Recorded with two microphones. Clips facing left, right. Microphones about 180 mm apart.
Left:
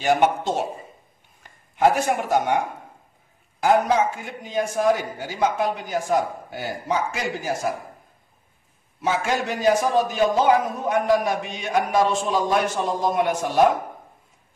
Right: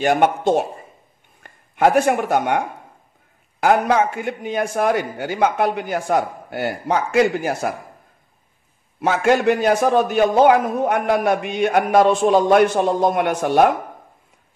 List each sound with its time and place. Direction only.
0.0 s a man's voice: 55° right (ahead or behind)
3.6 s a man's voice: 65° right (ahead or behind)
9.0 s a man's voice: 60° right (ahead or behind)